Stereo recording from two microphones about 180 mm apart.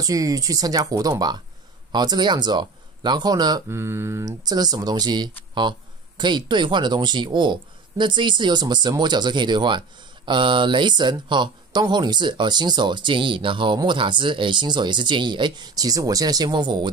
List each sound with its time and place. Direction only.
0.0 s speech: 20° right (ahead or behind)